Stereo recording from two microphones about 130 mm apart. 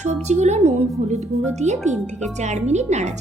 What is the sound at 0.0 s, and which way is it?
Speech, 60° right (ahead or behind).